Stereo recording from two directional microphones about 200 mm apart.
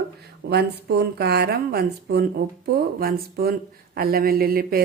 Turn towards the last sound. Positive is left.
turn(degrees=-45)  # may be behind; listen again after turning